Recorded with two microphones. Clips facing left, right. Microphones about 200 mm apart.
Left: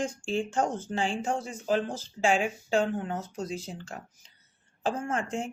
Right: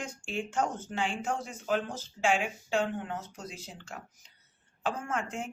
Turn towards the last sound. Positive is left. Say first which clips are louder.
# left 4 dB
turn(degrees=30)  # may be behind; listen again after turning